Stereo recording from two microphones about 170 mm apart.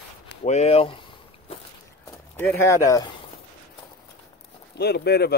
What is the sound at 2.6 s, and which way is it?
Speech, 15° left (ahead or behind).